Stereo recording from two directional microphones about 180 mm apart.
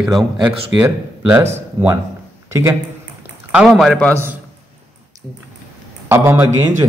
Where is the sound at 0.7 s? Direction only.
10° right (ahead or behind).